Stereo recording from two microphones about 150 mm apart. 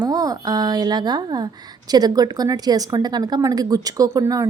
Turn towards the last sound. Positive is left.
turn(degrees=-20)  # may be behind; listen again after turning